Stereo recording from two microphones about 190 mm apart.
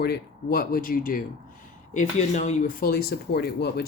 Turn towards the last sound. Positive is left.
turn(degrees=55)  # may be behind; listen again after turning